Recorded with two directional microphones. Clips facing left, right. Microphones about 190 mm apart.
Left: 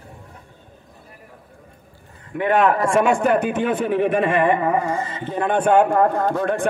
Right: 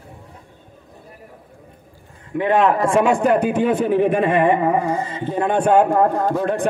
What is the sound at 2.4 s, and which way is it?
A man's voice, 30° right (ahead or behind).